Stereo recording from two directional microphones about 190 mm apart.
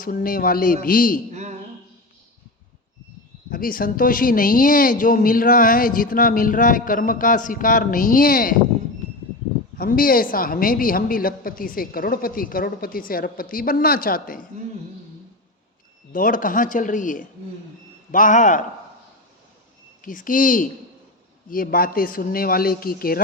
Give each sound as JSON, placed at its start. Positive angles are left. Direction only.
{"t": 0.0, "sound": "a woman's voice", "side_deg": 50}
{"t": 1.3, "sound": "a sound", "side_deg": -35}
{"t": 3.5, "sound": "a woman's voice", "side_deg": 50}
{"t": 9.7, "sound": "a woman's voice", "side_deg": 50}
{"t": 16.1, "sound": "a woman's voice", "side_deg": 45}
{"t": 20.0, "sound": "a woman's voice", "side_deg": 45}